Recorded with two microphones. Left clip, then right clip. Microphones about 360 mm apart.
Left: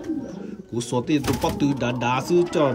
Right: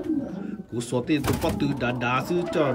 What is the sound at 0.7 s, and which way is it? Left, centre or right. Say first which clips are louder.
Speech: left 2 dB; centre.